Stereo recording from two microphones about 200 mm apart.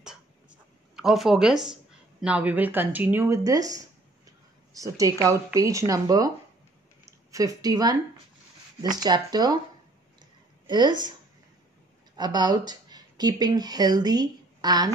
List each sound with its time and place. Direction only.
0.0 s writing: 5° right (ahead or behind)
2.2 s a woman's voice: 5° right (ahead or behind)
10.7 s speech: 20° right (ahead or behind)
12.2 s speech: 20° right (ahead or behind)